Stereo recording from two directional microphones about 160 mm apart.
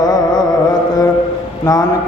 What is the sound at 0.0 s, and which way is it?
Music, 25° left (ahead or behind).